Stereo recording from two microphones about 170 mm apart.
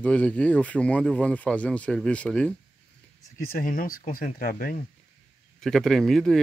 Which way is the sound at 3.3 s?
60° left (ahead or behind).